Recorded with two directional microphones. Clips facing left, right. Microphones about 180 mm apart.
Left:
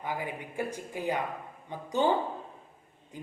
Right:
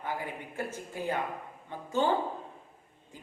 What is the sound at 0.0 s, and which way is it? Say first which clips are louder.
Speech: left 1 dB; 15° left (ahead or behind).